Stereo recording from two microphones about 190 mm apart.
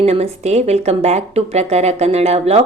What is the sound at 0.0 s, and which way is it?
Speech, 35° right (ahead or behind).